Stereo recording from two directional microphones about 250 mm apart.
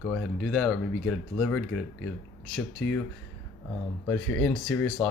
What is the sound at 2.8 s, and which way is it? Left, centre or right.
Speech, centre.